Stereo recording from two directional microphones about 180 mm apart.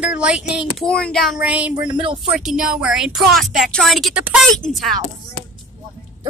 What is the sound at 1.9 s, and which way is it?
Speech, 30° right (ahead or behind).